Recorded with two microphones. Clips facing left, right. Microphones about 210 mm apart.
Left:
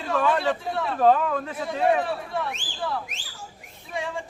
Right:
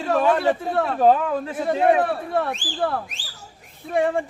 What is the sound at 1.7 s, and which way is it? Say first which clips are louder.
Speech: right 4 dB; 55° right (ahead or behind).